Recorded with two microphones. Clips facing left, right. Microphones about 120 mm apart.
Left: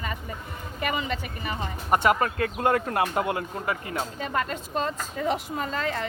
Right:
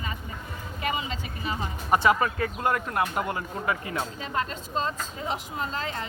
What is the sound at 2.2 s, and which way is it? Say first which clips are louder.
Speech: left 2 dB; 50° left (ahead or behind).